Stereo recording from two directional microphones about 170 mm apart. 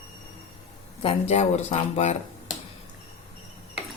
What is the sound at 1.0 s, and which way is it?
Speech, 40° left (ahead or behind).